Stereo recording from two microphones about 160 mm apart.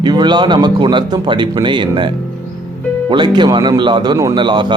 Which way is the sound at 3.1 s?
30° right (ahead or behind).